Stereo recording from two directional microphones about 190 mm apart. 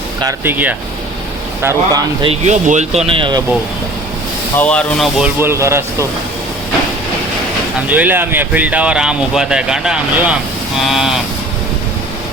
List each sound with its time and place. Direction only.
0.2 s speech: 15° right (ahead or behind)
1.6 s speech: 20° right (ahead or behind)
2.3 s speech: 40° right (ahead or behind)
4.5 s speech: 5° left (ahead or behind)
5.4 s speech: 15° right (ahead or behind)
7.9 s speech: 10° right (ahead or behind)